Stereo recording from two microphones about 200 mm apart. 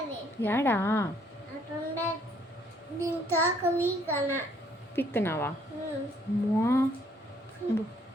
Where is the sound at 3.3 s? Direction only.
10° left (ahead or behind).